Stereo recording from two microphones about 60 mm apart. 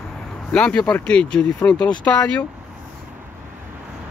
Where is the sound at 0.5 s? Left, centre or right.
Centre.